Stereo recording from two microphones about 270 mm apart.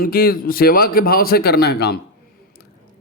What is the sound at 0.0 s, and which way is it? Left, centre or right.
A man's voice, left.